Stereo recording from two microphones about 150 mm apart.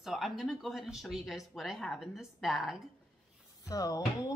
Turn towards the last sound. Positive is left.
turn(degrees=25)  # may be behind; listen again after turning